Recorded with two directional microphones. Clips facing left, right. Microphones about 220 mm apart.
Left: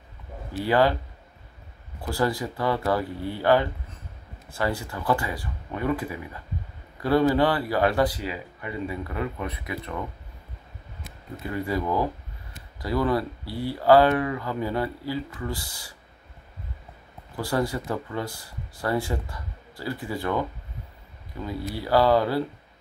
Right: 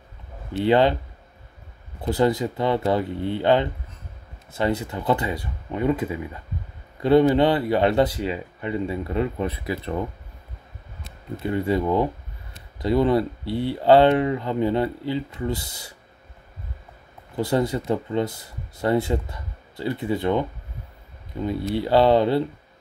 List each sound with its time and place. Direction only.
0.5 s speech: 25° right (ahead or behind)
2.0 s speech: 20° right (ahead or behind)
11.4 s speech: 25° right (ahead or behind)
17.4 s speech: 20° right (ahead or behind)